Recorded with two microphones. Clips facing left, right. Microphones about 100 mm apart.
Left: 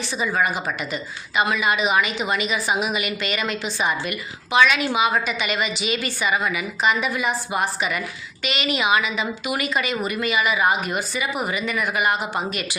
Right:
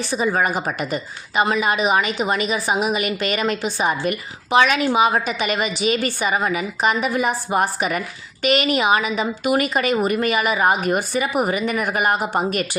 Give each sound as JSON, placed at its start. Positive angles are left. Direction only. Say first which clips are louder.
{"t": 0.1, "sound": "a woman's voice", "louder": "right 3 dB", "side_deg": -45}